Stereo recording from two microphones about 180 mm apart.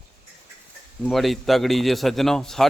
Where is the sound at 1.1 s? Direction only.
Centre (ahead or behind).